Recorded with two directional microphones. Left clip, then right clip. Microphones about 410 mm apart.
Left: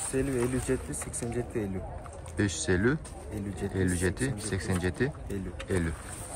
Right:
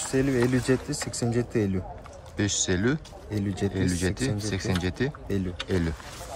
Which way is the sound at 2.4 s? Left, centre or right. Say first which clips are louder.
Right 2 dB; centre.